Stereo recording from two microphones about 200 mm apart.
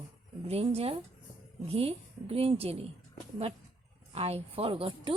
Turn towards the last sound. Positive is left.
turn(degrees=-25)  # may be behind; listen again after turning